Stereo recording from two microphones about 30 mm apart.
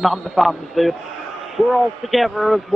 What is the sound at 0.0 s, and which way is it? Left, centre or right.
A man's voice, centre.